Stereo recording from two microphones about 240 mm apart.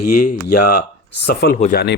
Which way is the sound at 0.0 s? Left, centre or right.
Left.